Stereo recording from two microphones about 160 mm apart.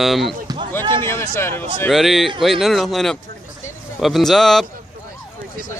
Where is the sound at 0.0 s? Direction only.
Centre (ahead or behind).